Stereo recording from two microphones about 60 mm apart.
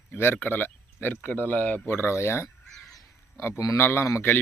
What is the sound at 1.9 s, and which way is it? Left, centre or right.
Speech, left.